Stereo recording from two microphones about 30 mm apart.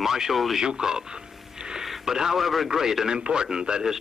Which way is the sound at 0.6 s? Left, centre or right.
Right.